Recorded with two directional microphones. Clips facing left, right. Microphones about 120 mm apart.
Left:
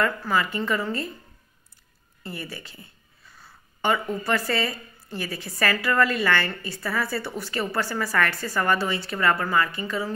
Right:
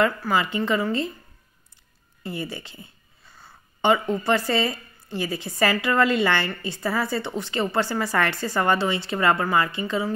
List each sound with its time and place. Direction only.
0.0 s a woman's voice: 15° right (ahead or behind)
2.2 s a woman's voice: 25° right (ahead or behind)
3.4 s a sound: 25° right (ahead or behind)
4.5 s a woman's voice: 25° right (ahead or behind)